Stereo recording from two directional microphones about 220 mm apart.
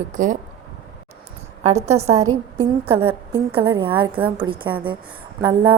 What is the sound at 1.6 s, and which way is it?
A woman's voice, 30° right (ahead or behind).